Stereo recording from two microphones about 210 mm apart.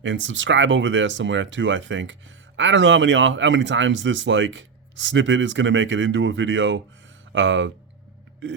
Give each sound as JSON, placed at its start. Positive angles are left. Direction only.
{"t": 0.0, "sound": "speech", "side_deg": -60}